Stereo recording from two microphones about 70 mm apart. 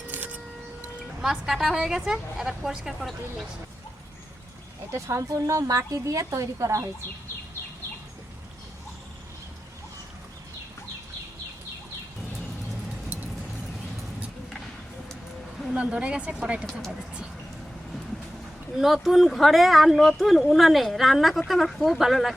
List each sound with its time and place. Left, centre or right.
0.1 s a sound: right
1.2 s speech: centre
4.9 s a woman's voice: right
15.7 s speech: centre
18.8 s speech: centre